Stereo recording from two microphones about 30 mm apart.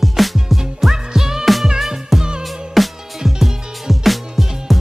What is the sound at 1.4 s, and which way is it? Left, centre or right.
Music, centre.